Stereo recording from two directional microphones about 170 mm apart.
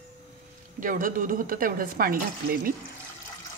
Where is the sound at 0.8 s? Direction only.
50° right (ahead or behind).